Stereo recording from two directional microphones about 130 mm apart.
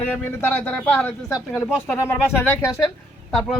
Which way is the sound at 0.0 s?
15° left (ahead or behind).